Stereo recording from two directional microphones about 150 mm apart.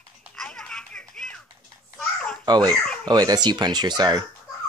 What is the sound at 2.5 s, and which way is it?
Speech, 30° right (ahead or behind).